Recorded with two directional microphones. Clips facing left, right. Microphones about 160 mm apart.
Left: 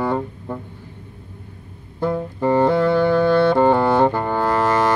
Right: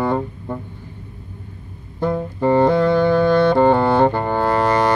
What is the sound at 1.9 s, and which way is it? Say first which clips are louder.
Music: right 1 dB; 25° right (ahead or behind).